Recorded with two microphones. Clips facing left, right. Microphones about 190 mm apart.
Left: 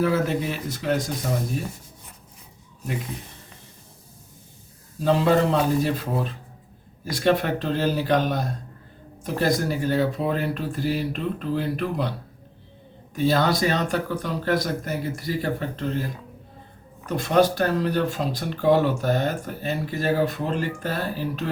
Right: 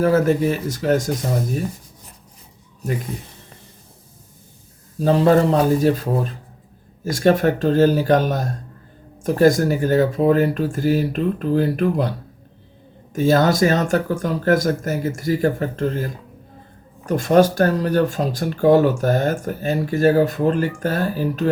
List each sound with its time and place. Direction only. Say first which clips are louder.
0.0 s speech: right 6 dB; 45° right (ahead or behind)
5.0 s speech: right 5 dB; 40° right (ahead or behind)
7.0 s speech: right 6 dB; 45° right (ahead or behind)
13.1 s speech: right 5 dB; 45° right (ahead or behind)
17.1 s speech: right 5 dB; 45° right (ahead or behind)